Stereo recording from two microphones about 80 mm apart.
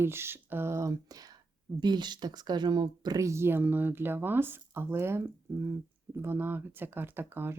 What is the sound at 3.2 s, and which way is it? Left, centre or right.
Speech, right.